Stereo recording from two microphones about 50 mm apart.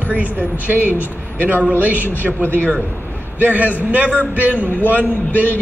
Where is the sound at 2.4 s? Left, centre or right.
Left.